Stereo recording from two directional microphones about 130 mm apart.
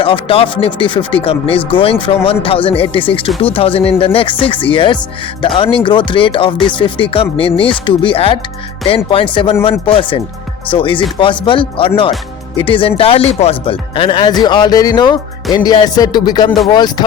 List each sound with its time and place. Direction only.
0.0 s speech: 45° left (ahead or behind)